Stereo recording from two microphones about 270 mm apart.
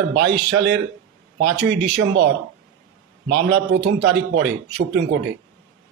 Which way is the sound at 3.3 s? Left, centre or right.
Right.